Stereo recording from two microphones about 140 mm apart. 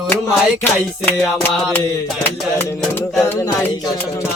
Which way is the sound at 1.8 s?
25° left (ahead or behind).